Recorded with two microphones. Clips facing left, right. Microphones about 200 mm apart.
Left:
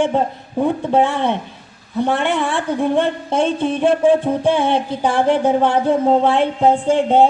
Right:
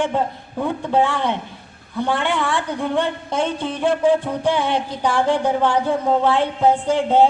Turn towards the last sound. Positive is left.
turn(degrees=20)  # may be behind; listen again after turning